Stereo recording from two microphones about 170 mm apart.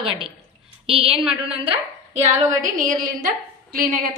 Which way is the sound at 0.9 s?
35° right (ahead or behind).